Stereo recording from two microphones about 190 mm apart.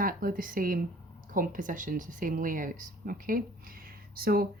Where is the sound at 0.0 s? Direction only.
50° right (ahead or behind).